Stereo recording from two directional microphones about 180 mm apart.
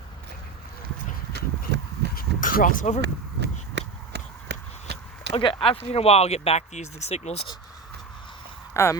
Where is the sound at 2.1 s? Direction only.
55° left (ahead or behind).